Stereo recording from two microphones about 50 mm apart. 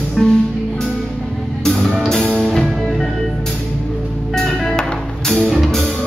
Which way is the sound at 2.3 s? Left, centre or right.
Centre.